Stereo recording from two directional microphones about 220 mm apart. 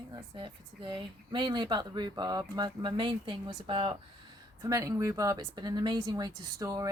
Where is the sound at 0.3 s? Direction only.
20° right (ahead or behind).